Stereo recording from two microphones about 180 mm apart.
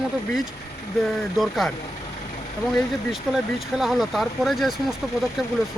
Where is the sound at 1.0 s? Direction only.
Centre (ahead or behind).